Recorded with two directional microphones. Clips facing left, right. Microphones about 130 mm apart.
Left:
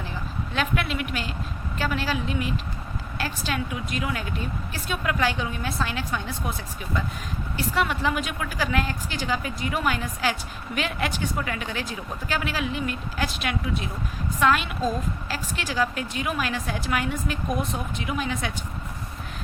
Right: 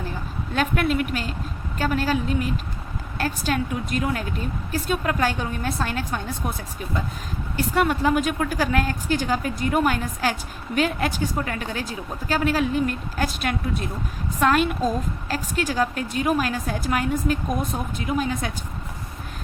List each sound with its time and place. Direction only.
0.5 s a woman's voice: 45° right (ahead or behind)
7.5 s a woman's voice: 45° right (ahead or behind)